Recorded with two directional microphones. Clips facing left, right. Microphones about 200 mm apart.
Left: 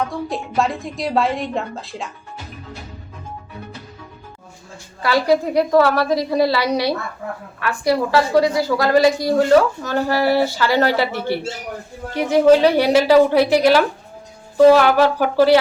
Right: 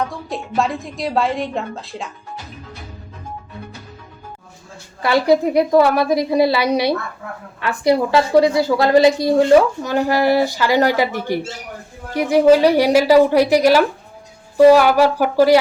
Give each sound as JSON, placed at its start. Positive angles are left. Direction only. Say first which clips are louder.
{"t": 0.3, "sound": "a woman's voice", "louder": "even", "side_deg": 0}
{"t": 5.0, "sound": "a woman's voice", "louder": "right 2 dB", "side_deg": -20}